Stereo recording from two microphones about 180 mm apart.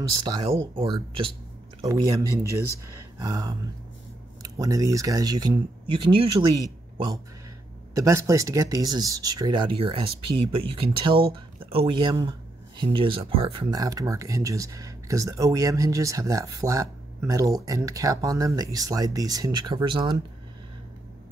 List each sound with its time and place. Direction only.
0.3 s speech: 25° right (ahead or behind)